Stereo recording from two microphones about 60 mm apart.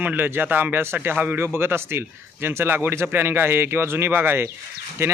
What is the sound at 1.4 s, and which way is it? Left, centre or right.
Speech, right.